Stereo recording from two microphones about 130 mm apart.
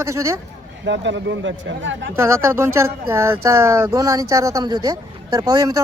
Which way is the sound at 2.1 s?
20° right (ahead or behind).